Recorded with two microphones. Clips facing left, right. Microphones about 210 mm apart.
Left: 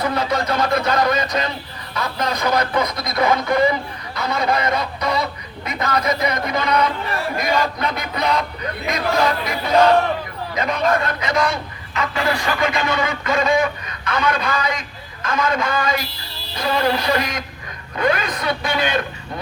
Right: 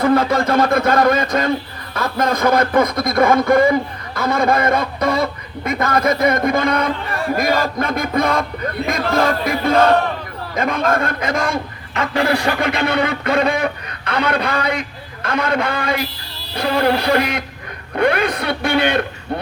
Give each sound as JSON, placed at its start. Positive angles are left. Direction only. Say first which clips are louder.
{"t": 0.0, "sound": "a man's voice", "louder": "right 6 dB", "side_deg": -50}
{"t": 12.2, "sound": "speech", "louder": "right 3 dB", "side_deg": -65}